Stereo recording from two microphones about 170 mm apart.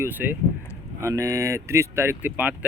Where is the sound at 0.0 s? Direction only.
10° right (ahead or behind).